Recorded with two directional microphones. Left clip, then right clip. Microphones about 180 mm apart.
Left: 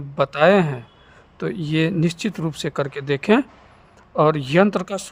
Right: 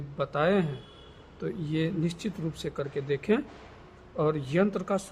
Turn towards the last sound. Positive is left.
turn(degrees=55)  # may be behind; listen again after turning